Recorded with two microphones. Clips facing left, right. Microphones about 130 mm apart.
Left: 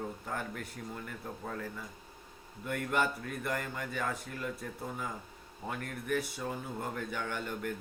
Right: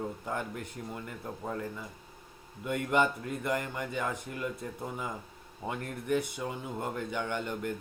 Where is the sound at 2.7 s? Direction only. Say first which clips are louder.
Right 4 dB; 20° right (ahead or behind).